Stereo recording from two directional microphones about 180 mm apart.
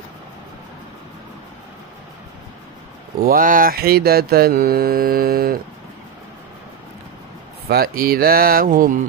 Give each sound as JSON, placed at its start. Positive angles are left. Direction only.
{"t": 3.3, "sound": "mantra", "side_deg": -50}
{"t": 7.6, "sound": "mantra", "side_deg": -55}